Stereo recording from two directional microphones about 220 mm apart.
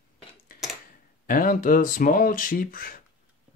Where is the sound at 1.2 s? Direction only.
40° left (ahead or behind).